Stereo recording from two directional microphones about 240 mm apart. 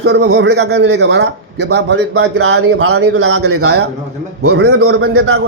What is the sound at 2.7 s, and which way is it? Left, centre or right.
Speech, right.